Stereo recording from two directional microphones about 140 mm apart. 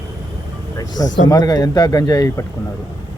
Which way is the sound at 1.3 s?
25° left (ahead or behind).